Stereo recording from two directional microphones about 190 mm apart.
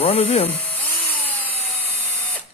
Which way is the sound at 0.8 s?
10° left (ahead or behind).